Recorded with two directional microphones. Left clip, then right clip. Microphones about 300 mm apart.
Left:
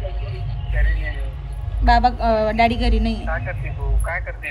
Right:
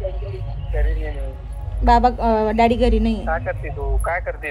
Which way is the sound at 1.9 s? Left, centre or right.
Right.